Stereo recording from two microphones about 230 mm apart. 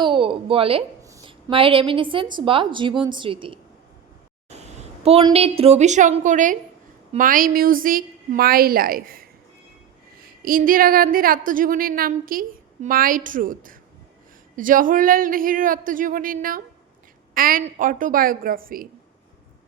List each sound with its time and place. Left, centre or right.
0.0 s a woman's voice: right
10.4 s speech: right